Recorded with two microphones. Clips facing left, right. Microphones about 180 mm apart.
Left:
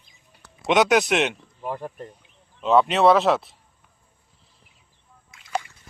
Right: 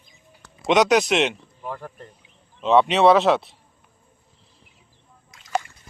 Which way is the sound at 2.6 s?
Centre (ahead or behind).